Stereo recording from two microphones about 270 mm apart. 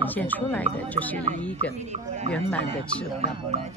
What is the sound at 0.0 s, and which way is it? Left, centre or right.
Speech, centre.